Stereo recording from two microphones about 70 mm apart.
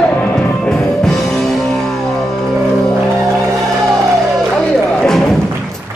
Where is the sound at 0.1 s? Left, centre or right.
Left.